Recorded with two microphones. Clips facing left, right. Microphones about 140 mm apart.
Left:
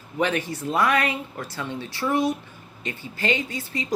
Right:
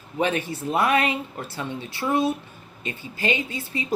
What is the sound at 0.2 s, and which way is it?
Speech, 20° right (ahead or behind).